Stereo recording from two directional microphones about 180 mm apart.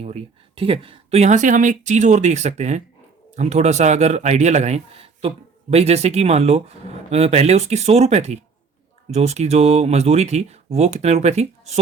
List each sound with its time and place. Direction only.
0.0 s speech: 30° right (ahead or behind)